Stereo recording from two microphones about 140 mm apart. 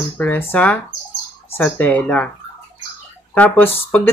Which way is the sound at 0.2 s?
15° left (ahead or behind).